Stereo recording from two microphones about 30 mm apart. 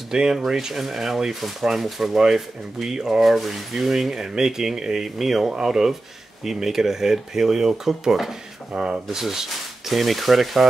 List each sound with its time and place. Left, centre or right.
0.1 s speech: centre
3.2 s speech: centre
5.5 s speech: centre